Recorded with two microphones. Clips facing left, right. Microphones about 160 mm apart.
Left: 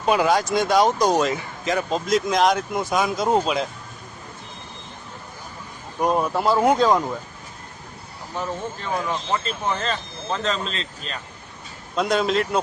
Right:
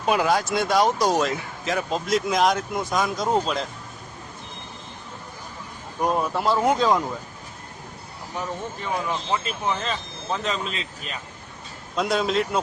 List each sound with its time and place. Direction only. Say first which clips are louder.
0.0 s speech: left 2 dB; centre (ahead or behind)
6.0 s speech: left 2 dB; 5° left (ahead or behind)
8.4 s speech: left 2 dB; 5° right (ahead or behind)